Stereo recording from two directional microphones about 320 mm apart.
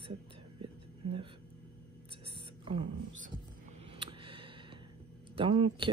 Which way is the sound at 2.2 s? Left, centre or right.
Centre.